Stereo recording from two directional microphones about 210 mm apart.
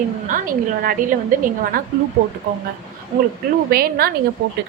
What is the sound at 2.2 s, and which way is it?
Speech, 40° right (ahead or behind).